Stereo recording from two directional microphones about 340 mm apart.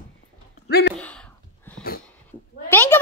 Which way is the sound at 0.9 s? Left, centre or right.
Centre.